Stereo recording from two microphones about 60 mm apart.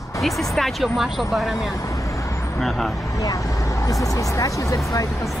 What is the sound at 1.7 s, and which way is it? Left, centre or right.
Vehicle, left.